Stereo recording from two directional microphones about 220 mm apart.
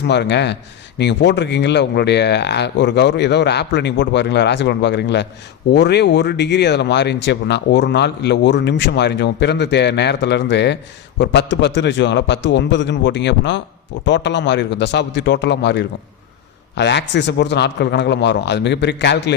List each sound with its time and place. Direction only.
0.1 s speech: 50° left (ahead or behind)